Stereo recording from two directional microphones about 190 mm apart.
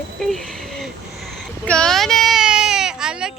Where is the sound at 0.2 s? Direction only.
Centre (ahead or behind).